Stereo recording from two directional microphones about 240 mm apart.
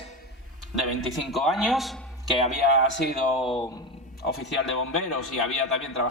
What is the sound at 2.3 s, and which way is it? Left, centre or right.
Speech, left.